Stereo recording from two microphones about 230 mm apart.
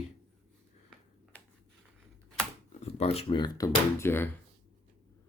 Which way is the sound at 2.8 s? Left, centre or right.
Left.